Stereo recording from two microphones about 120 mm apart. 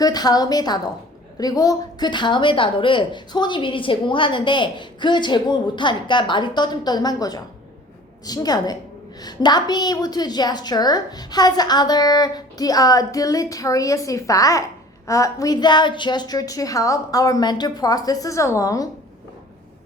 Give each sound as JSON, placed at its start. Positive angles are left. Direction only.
{"t": 0.0, "sound": "speech", "side_deg": 35}